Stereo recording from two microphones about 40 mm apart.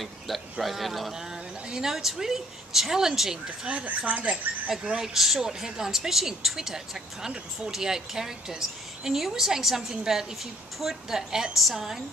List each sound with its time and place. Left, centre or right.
0.0 s speech: centre
1.1 s a woman's voice: centre
3.4 s speech: right
3.8 s speech: right
5.0 s a woman's voice: centre